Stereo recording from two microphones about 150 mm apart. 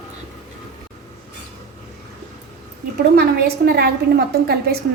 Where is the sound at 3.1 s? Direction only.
90° right.